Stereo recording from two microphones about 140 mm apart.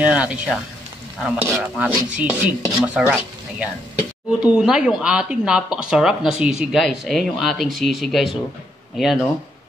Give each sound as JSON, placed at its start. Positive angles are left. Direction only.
{"t": 0.0, "sound": "speech", "side_deg": -10}